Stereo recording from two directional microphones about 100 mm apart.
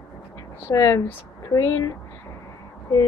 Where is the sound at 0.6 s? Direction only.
30° left (ahead or behind).